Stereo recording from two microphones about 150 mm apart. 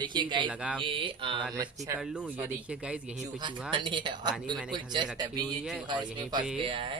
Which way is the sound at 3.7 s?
35° right (ahead or behind).